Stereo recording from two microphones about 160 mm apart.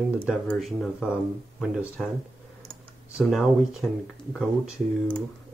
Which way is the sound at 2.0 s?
Centre (ahead or behind).